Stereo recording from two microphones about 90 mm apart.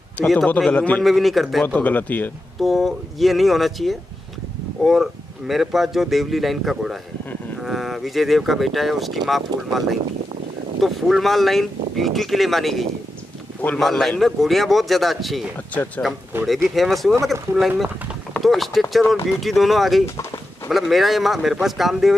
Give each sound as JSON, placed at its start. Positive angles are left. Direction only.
{"t": 0.2, "sound": "speech", "side_deg": 0}
{"t": 0.6, "sound": "speech", "side_deg": 15}
{"t": 1.0, "sound": "speech", "side_deg": 0}
{"t": 1.6, "sound": "speech", "side_deg": 15}
{"t": 2.6, "sound": "speech", "side_deg": 0}
{"t": 16.6, "sound": "speech", "side_deg": 0}